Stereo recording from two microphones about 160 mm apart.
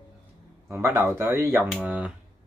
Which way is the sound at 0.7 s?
20° right (ahead or behind).